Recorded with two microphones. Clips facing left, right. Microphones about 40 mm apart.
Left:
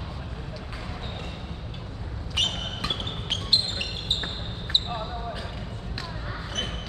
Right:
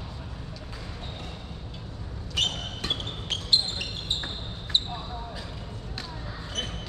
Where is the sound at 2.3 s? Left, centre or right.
Centre.